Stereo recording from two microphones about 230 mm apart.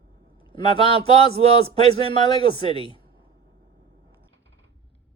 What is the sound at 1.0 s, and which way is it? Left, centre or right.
Speech, right.